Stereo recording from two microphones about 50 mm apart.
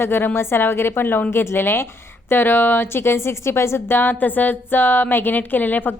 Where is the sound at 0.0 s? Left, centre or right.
Left.